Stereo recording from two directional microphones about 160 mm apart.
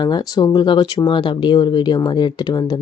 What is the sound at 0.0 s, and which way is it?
Speech, 25° left (ahead or behind).